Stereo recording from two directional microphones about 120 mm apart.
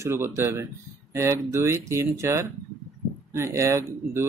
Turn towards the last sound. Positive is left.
turn(degrees=-25)  # may be behind; listen again after turning